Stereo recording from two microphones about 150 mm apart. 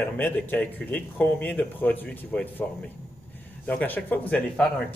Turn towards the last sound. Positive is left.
turn(degrees=10)  # may be behind; listen again after turning